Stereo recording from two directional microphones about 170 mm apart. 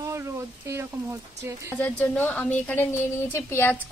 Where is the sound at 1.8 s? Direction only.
10° left (ahead or behind).